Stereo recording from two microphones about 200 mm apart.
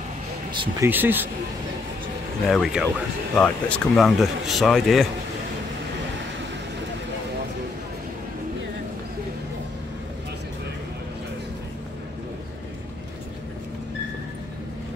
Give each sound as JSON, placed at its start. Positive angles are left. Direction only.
{"t": 0.5, "sound": "speech", "side_deg": -25}
{"t": 0.8, "sound": "speech", "side_deg": -10}
{"t": 2.5, "sound": "speech", "side_deg": 0}